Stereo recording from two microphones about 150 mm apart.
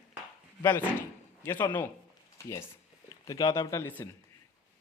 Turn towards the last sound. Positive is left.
turn(degrees=15)  # may be behind; listen again after turning